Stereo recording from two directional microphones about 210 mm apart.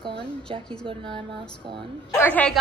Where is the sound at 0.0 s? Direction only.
25° right (ahead or behind).